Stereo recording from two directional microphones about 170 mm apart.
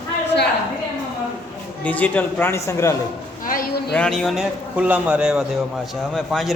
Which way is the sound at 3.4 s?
55° left (ahead or behind).